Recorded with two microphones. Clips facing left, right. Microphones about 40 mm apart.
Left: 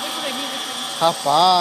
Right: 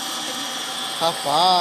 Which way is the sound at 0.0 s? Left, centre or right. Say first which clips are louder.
Left 3 dB; centre.